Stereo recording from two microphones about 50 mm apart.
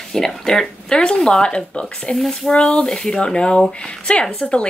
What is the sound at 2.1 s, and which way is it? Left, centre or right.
Speech, centre.